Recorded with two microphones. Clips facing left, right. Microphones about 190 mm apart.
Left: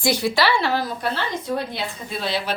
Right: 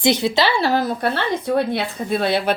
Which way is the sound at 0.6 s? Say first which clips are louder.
Right 4 dB; 45° right (ahead or behind).